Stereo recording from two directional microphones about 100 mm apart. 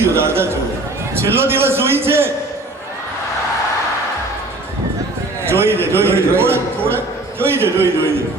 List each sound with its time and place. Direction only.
0.0 s a man's voice: 25° right (ahead or behind)
5.5 s a man's voice: 25° right (ahead or behind)